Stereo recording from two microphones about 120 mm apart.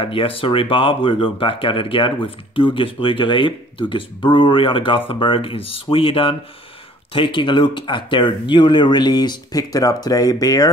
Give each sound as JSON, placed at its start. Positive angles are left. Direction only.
{"t": 0.0, "sound": "speech", "side_deg": 50}